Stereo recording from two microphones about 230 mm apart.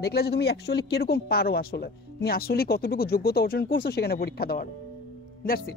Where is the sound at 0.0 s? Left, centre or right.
Left.